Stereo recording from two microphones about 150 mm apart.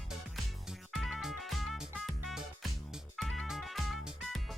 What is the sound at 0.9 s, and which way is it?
Music, centre (ahead or behind).